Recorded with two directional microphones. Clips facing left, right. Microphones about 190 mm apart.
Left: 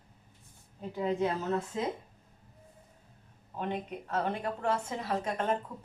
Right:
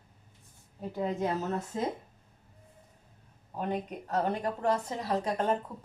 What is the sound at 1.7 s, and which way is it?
Speech, 45° right (ahead or behind).